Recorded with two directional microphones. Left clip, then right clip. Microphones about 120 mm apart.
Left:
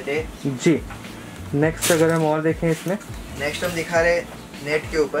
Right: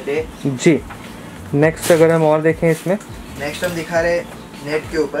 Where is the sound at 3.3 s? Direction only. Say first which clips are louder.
Right 2 dB; centre (ahead or behind).